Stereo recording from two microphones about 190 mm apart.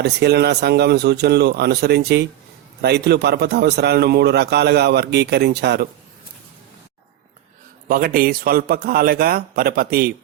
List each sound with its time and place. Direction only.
0.0 s a man's voice: 60° right (ahead or behind)
7.9 s a man's voice: 50° right (ahead or behind)